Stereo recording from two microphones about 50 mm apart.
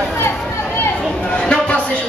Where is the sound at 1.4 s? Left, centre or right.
Centre.